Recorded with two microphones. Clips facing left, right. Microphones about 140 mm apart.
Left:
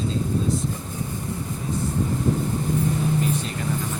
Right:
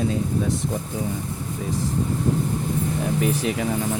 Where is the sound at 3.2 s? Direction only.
85° right.